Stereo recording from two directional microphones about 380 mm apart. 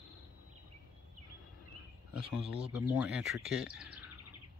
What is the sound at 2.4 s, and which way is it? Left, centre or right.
Speech, centre.